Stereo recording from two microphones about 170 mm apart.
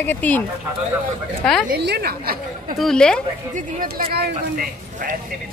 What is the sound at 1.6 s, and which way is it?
Speech, 70° right (ahead or behind).